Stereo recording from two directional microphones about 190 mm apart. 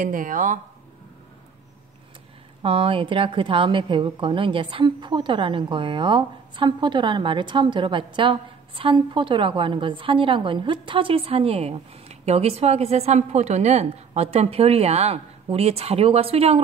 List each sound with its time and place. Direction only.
0.0 s speech: 45° right (ahead or behind)
2.6 s a woman's voice: 30° right (ahead or behind)